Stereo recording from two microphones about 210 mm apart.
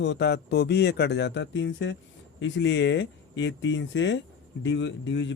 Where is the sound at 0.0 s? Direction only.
55° left (ahead or behind).